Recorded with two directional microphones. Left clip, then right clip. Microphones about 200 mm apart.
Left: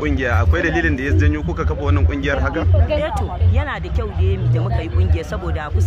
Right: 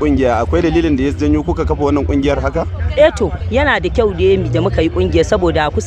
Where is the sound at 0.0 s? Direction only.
25° right (ahead or behind).